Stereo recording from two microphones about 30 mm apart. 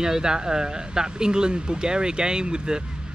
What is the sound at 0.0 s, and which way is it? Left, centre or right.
Speech, right.